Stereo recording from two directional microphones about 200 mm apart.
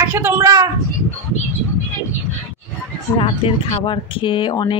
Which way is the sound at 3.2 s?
25° left (ahead or behind).